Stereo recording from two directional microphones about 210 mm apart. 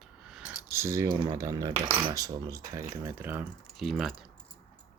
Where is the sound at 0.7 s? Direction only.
15° right (ahead or behind).